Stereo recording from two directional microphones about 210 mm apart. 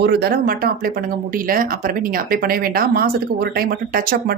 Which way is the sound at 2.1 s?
45° right (ahead or behind).